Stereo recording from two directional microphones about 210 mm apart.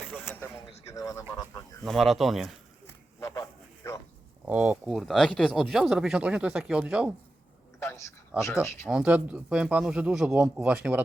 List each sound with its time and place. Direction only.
0.9 s a sound: 15° left (ahead or behind)
1.8 s a man's voice: centre (ahead or behind)
2.8 s a sound: 15° left (ahead or behind)
4.4 s a man's voice: 5° right (ahead or behind)
7.8 s a man's voice: 15° left (ahead or behind)
8.9 s a man's voice: 5° right (ahead or behind)